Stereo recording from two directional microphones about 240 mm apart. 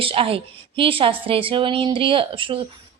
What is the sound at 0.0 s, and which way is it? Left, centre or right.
A woman's voice, right.